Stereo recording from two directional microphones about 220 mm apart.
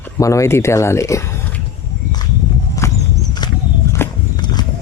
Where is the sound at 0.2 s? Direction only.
15° left (ahead or behind).